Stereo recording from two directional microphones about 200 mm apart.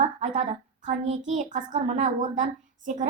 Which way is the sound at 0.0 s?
35° right (ahead or behind).